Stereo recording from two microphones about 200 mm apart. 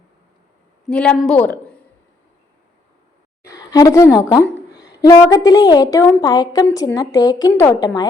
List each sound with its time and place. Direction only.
0.9 s a woman's voice: 5° left (ahead or behind)
3.4 s a sound: 20° left (ahead or behind)
4.3 s a woman's voice: 20° left (ahead or behind)